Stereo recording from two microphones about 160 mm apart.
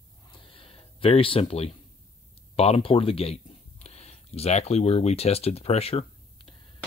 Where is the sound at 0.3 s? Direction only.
30° left (ahead or behind).